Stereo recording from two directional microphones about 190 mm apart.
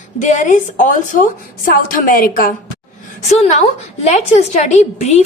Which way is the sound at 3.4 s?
35° left (ahead or behind).